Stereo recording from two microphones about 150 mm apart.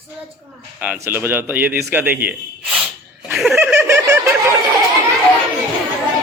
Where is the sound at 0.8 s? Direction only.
10° right (ahead or behind).